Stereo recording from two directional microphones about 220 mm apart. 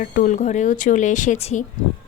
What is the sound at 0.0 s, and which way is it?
A woman's voice, 40° left (ahead or behind).